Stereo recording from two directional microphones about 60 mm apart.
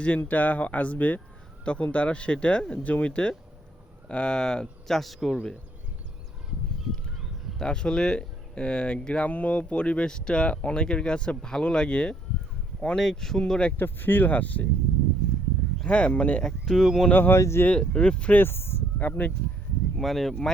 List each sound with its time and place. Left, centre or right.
0.3 s speech: left; by 5.4 s centre
7.6 s speech: centre
13.7 s speech: left
15.8 s speech: centre
16.4 s speech: centre
16.8 s speech: centre
17.1 s speech: left
17.3 s speech: left
17.7 s speech: centre
18.4 s speech: left
18.9 s speech: left
20.0 s speech: centre